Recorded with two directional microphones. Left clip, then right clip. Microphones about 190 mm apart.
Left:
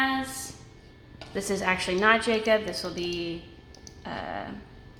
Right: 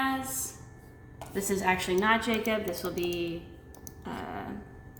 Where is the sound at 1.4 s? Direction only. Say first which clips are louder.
Left 1 dB; 50° left (ahead or behind).